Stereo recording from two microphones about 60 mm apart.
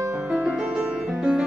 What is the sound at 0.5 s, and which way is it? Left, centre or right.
Music, centre.